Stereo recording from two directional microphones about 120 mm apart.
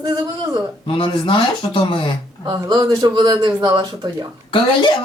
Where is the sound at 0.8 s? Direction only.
45° left (ahead or behind).